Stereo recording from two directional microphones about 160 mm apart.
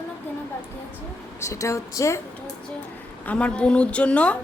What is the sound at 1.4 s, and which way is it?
Speech, 20° left (ahead or behind).